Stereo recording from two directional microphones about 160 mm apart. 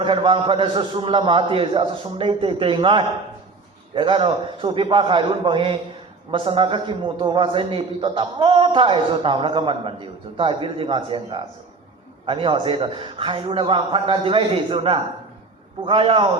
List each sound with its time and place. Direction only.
0.0 s a man's voice: 30° right (ahead or behind)